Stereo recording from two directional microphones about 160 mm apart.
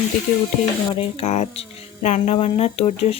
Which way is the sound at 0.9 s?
40° left (ahead or behind).